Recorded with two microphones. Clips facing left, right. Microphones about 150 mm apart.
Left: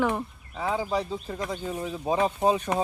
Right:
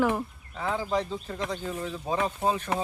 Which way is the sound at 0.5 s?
10° left (ahead or behind).